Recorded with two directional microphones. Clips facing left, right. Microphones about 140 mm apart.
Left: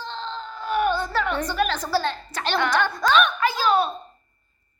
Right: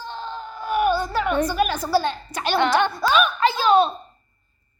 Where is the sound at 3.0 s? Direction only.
10° right (ahead or behind).